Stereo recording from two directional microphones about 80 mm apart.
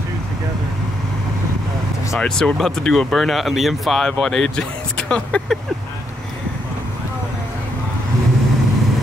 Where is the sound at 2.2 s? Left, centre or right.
Centre.